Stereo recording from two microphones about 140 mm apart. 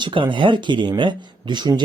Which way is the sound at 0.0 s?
35° right (ahead or behind).